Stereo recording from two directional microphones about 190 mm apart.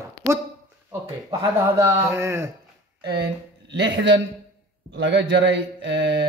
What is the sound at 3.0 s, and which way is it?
A man's voice, 60° right (ahead or behind).